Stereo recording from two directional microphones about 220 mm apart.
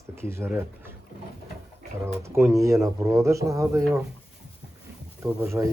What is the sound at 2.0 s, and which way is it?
Speech, 10° right (ahead or behind).